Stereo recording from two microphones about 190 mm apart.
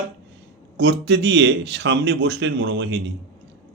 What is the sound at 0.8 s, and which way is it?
Speech, 65° right (ahead or behind).